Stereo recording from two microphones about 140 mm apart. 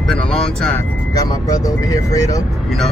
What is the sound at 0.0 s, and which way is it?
Speech, 5° left (ahead or behind).